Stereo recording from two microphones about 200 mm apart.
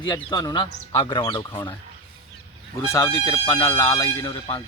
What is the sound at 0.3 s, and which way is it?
Speech, 20° left (ahead or behind).